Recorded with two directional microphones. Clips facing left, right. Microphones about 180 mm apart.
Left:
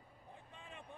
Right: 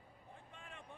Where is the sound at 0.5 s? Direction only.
15° left (ahead or behind).